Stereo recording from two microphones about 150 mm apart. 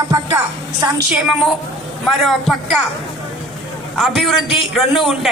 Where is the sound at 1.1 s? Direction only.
5° right (ahead or behind).